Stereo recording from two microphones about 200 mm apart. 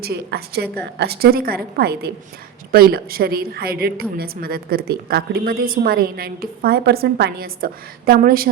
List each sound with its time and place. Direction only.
0.0 s a woman's voice: 55° right (ahead or behind)